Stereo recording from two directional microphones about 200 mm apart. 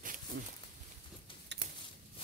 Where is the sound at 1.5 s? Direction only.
60° right (ahead or behind).